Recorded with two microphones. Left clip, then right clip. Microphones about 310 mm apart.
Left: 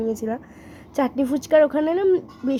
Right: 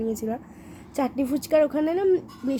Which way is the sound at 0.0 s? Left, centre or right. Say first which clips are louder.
Left 3 dB; centre.